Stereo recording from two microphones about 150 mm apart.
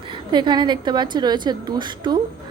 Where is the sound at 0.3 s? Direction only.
30° right (ahead or behind).